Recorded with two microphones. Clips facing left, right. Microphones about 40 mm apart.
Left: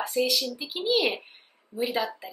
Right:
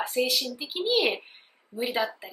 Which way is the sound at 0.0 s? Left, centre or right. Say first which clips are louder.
Left 1 dB; centre.